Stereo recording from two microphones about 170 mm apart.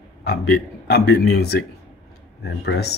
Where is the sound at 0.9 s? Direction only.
75° left (ahead or behind).